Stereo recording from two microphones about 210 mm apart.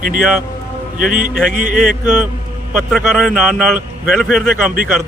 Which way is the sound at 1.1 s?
40° right (ahead or behind).